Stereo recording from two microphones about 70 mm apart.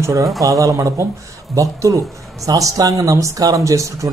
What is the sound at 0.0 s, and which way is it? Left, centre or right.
Speech, right.